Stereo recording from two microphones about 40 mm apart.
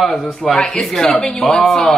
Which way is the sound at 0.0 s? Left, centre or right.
Centre.